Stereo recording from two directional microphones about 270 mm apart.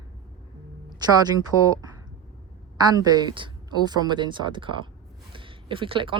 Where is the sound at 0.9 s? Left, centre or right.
Centre.